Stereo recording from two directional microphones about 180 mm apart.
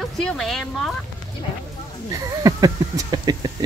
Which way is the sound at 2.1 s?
20° right (ahead or behind).